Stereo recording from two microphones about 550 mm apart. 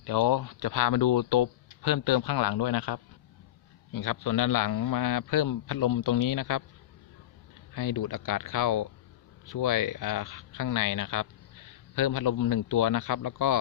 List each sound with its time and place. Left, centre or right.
0.0 s speech: left
7.7 s speech: left